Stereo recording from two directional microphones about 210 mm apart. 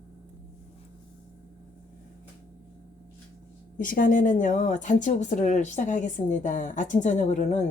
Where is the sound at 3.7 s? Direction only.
40° left (ahead or behind).